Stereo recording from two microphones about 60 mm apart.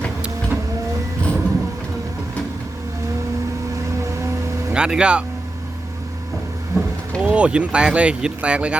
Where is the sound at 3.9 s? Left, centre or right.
Right.